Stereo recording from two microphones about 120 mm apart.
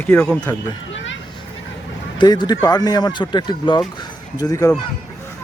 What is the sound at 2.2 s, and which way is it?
Speech, 35° left (ahead or behind).